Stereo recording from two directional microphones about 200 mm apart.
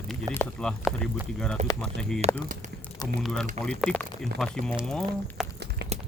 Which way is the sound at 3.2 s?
5° left (ahead or behind).